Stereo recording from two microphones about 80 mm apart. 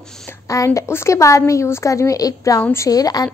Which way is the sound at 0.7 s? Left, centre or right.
Left.